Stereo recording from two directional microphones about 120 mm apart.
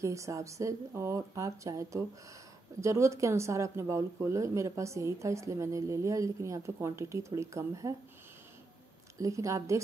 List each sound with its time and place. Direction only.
0.0 s speech: 25° right (ahead or behind)
9.2 s speech: 25° right (ahead or behind)